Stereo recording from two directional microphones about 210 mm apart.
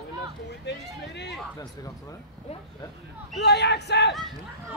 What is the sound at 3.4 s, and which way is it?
Speech, 55° left (ahead or behind).